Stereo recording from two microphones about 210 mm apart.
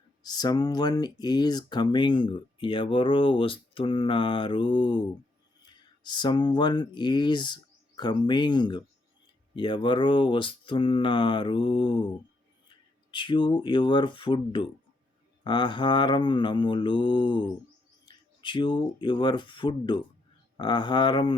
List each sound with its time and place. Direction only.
0.2 s speech: 20° left (ahead or behind)